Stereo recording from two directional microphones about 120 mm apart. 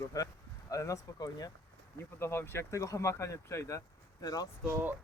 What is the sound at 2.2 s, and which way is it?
Speech, 20° left (ahead or behind).